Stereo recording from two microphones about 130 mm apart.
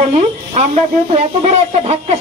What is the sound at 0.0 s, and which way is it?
Speech, 60° right (ahead or behind).